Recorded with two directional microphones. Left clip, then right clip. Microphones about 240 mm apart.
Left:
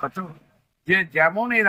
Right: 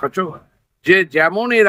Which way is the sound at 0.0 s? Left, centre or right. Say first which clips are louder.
Right 9 dB; centre.